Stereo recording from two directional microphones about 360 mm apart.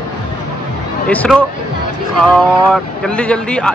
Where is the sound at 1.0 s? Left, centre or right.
Centre.